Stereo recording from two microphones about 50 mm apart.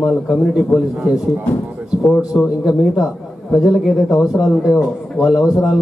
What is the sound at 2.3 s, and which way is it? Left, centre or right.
A man's voice, centre.